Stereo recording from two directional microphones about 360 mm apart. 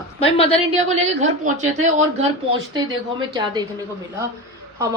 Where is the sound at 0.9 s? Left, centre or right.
Centre.